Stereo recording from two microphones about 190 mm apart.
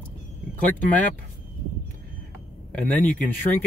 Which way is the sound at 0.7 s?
10° left (ahead or behind).